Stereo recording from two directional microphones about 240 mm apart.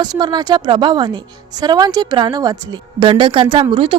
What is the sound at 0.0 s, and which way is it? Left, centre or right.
A woman's voice, centre.